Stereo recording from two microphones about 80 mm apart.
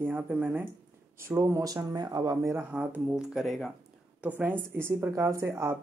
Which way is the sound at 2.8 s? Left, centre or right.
Centre.